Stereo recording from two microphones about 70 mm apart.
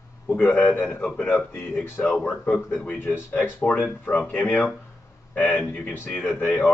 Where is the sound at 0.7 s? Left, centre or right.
Centre.